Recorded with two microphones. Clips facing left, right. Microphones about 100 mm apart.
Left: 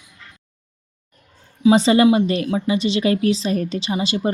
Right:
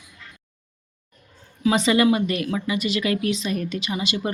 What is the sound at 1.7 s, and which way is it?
Speech, 30° left (ahead or behind).